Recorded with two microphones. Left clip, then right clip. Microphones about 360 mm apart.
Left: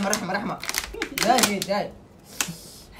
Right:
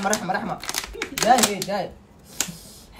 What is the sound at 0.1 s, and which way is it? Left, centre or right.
Speech, centre.